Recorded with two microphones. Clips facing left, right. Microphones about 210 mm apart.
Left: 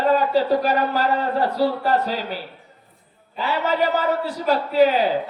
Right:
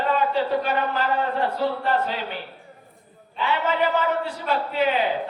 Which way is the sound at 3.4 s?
40° left (ahead or behind).